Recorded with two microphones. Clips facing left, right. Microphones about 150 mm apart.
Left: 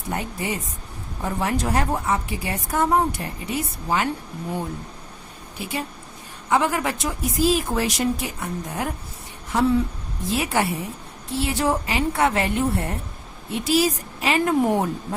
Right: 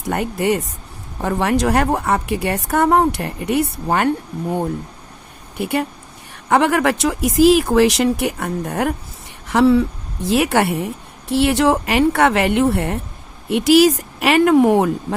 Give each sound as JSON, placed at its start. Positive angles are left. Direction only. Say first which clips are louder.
{"t": 0.0, "sound": "a woman's voice", "louder": "right 8 dB", "side_deg": -70}
{"t": 5.5, "sound": "a woman's voice", "louder": "right 9 dB", "side_deg": -60}
{"t": 9.5, "sound": "speech", "louder": "right 7 dB", "side_deg": -85}
{"t": 10.2, "sound": "a woman's voice", "louder": "right 7 dB", "side_deg": -70}